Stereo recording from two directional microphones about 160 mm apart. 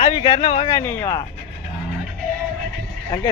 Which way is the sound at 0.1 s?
30° left (ahead or behind).